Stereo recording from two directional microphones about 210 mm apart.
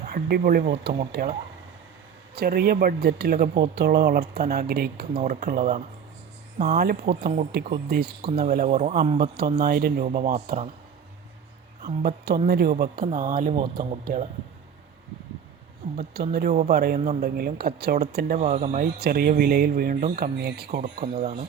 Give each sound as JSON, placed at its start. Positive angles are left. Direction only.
{"t": 0.0, "sound": "speech", "side_deg": -45}
{"t": 2.3, "sound": "speech", "side_deg": -50}
{"t": 9.6, "sound": "speech", "side_deg": -45}
{"t": 12.0, "sound": "speech", "side_deg": -50}
{"t": 15.8, "sound": "speech", "side_deg": -45}
{"t": 17.0, "sound": "speech", "side_deg": -30}
{"t": 17.2, "sound": "speech", "side_deg": -45}
{"t": 18.3, "sound": "speech", "side_deg": -30}
{"t": 18.9, "sound": "speech", "side_deg": -45}
{"t": 21.0, "sound": "speech", "side_deg": -30}